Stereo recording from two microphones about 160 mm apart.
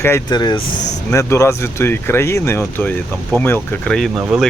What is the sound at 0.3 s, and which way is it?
Speech, 25° left (ahead or behind).